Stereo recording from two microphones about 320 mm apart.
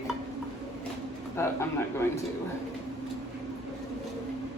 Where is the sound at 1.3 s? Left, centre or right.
Centre.